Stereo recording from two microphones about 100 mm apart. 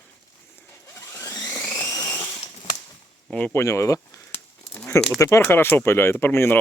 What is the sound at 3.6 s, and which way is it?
Speech, 30° left (ahead or behind).